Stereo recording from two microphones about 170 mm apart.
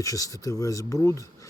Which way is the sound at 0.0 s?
20° left (ahead or behind).